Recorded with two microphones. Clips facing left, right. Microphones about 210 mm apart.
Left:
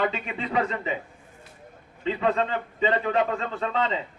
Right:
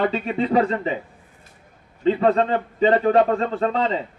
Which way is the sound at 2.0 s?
40° right (ahead or behind).